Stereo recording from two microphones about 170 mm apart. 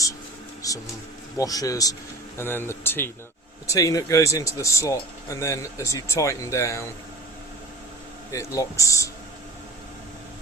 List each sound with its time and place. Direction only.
0.6 s a sound: 20° left (ahead or behind)
1.4 s speech: 20° left (ahead or behind)
8.3 s speech: 20° left (ahead or behind)